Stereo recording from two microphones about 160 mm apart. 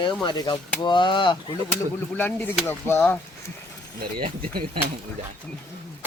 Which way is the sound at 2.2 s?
10° left (ahead or behind).